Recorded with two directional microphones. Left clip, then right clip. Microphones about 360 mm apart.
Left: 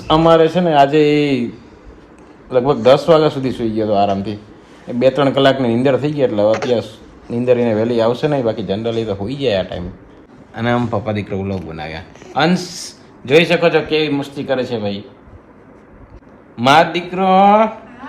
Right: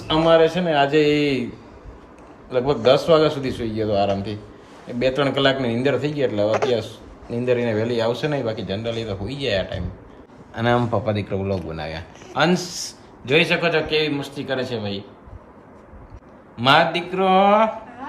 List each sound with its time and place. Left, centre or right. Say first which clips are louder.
0.1 s a man's voice: left 5 dB; centre
2.5 s a man's voice: left 6 dB; centre
16.6 s a man's voice: left 5 dB; centre